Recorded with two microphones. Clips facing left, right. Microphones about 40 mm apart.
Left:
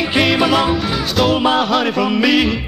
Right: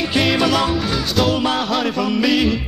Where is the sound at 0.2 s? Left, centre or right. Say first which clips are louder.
Left 3 dB; centre.